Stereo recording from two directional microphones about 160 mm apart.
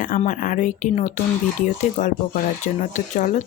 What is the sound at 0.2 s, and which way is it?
Speech, 55° left (ahead or behind).